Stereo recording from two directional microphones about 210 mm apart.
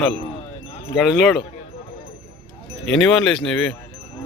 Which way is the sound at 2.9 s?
Centre (ahead or behind).